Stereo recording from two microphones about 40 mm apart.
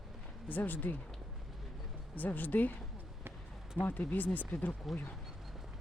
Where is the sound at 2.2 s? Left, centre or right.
Left.